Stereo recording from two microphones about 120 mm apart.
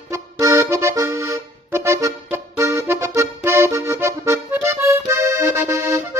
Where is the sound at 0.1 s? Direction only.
25° right (ahead or behind).